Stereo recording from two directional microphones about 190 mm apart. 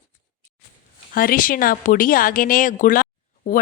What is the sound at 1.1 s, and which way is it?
A woman's voice, 50° left (ahead or behind).